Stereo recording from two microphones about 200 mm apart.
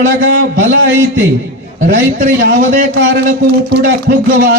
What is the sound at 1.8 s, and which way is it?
A man's voice, 45° right (ahead or behind).